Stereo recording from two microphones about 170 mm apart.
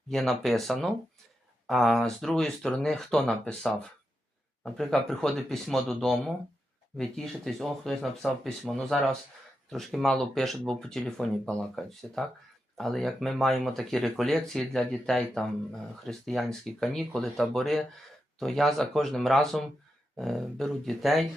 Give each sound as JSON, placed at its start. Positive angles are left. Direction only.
{"t": 0.1, "sound": "speech", "side_deg": 0}